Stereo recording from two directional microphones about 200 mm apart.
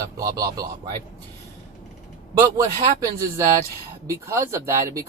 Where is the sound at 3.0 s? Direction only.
15° right (ahead or behind).